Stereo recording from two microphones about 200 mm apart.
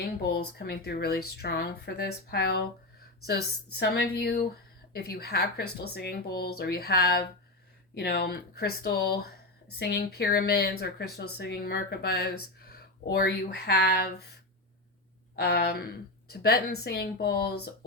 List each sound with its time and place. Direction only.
0.0 s speech: 50° left (ahead or behind)
15.4 s speech: 50° left (ahead or behind)